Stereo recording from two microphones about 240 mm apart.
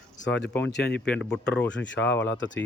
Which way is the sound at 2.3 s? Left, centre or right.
Left.